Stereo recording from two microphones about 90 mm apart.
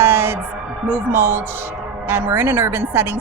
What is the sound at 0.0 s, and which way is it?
Music, 25° right (ahead or behind).